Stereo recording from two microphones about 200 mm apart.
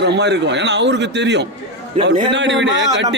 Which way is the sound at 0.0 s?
55° right (ahead or behind).